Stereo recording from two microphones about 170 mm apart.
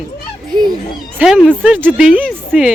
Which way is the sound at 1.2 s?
5° right (ahead or behind).